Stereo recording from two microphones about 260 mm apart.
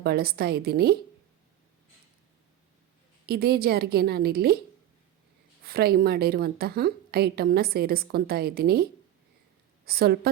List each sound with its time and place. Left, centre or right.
0.0 s a woman's voice: right
3.2 s a woman's voice: right
5.6 s a woman's voice: right